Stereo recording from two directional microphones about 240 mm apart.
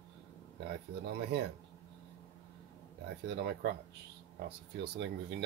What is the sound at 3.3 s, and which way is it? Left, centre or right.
Speech, right.